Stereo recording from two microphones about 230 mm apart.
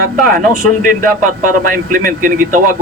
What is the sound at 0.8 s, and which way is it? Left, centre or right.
A man's voice, right.